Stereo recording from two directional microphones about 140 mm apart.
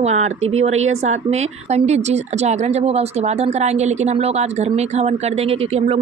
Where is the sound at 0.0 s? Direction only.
55° right (ahead or behind).